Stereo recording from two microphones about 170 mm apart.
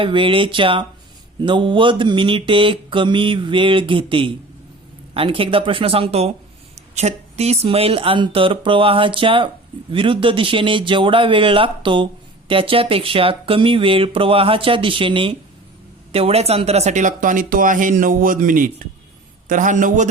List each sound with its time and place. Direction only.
0.0 s mantra: 30° right (ahead or behind)
5.1 s speech: 30° right (ahead or behind); by 20.1 s 45° right (ahead or behind)